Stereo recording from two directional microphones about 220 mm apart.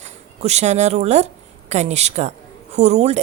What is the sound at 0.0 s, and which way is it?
A woman's voice, 30° right (ahead or behind).